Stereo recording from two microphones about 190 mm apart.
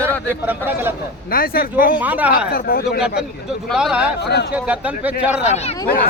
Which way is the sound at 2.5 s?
50° left (ahead or behind).